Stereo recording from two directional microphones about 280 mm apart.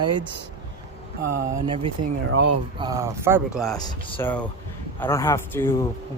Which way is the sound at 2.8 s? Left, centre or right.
Centre.